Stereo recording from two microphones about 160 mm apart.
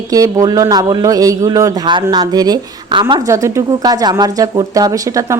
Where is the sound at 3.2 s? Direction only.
20° right (ahead or behind).